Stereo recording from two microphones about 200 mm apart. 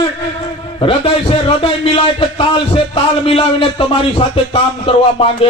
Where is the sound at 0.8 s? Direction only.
25° left (ahead or behind).